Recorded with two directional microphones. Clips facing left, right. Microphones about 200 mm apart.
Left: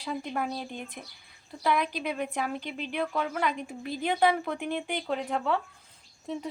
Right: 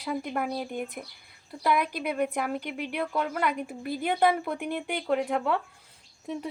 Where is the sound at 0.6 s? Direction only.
10° right (ahead or behind).